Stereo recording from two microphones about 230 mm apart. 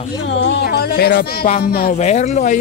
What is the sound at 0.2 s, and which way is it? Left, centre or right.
Speech, left.